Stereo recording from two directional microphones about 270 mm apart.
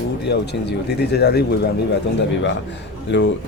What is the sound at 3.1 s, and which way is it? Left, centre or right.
Speech, left.